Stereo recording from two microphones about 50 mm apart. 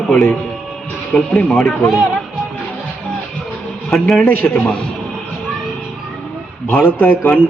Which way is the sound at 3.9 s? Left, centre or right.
Centre.